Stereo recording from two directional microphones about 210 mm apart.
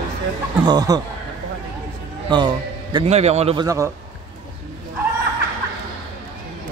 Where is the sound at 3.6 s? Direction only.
15° right (ahead or behind).